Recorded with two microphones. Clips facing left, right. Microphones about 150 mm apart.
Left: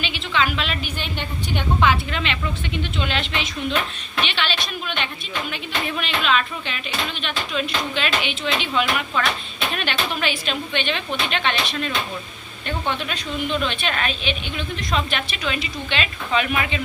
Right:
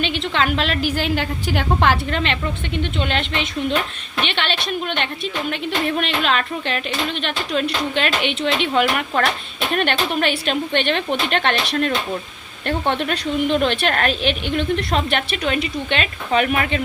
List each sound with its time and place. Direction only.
0.2 s a woman's voice: 60° right (ahead or behind)